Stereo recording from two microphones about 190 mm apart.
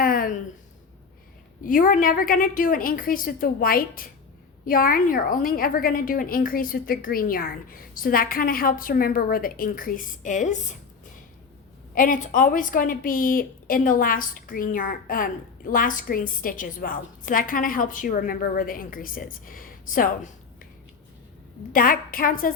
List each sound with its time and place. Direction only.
0.0 s a sound: 50° left (ahead or behind)
1.6 s a woman's voice: 45° left (ahead or behind)
11.9 s a woman's voice: 45° left (ahead or behind)
21.7 s a woman's voice: 50° left (ahead or behind)